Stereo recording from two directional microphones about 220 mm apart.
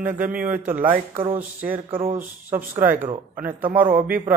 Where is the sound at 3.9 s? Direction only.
40° right (ahead or behind).